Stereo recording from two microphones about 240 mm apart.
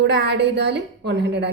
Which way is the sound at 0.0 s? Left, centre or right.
Right.